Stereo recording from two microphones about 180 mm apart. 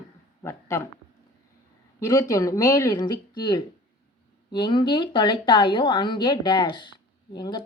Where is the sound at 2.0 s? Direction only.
20° left (ahead or behind).